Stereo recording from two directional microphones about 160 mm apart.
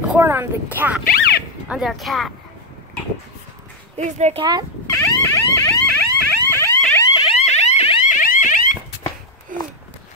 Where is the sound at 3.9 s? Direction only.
45° right (ahead or behind).